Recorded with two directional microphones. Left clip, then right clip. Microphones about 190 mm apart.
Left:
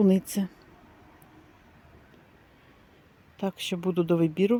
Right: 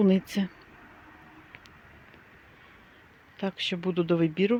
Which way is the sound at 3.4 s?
5° left (ahead or behind).